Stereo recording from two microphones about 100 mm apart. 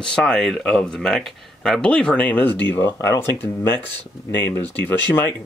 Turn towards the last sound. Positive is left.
turn(degrees=20)  # may be behind; listen again after turning